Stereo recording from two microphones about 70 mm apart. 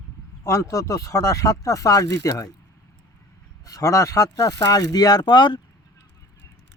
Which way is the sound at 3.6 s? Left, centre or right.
Left.